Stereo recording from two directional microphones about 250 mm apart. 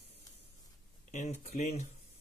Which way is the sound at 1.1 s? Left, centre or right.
Left.